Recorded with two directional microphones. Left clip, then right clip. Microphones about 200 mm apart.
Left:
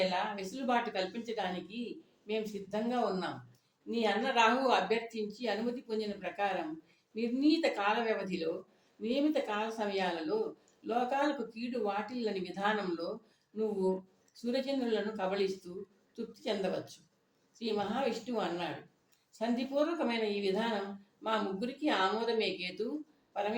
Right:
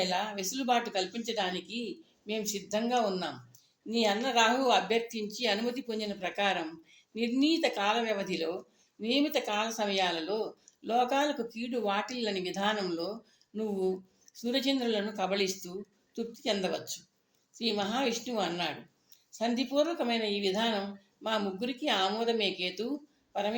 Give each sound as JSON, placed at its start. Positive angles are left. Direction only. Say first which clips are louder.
{"t": 0.1, "sound": "speech", "louder": "right 3 dB", "side_deg": -50}
{"t": 14.3, "sound": "a woman's voice", "louder": "right 4 dB", "side_deg": -50}